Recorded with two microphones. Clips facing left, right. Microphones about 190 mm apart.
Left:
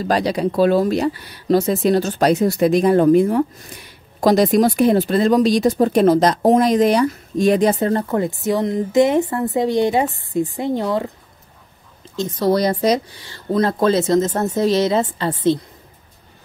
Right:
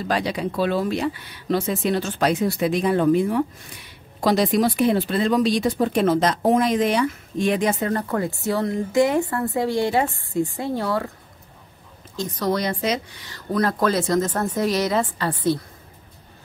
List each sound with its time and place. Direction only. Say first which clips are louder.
0.0 s speech: left 5 dB; 40° left (ahead or behind)
8.1 s speech: left 4 dB; 20° left (ahead or behind)
12.2 s speech: left 6 dB; 25° left (ahead or behind)